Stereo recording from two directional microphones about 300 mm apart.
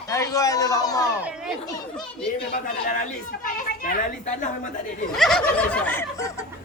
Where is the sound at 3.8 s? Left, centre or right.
Left.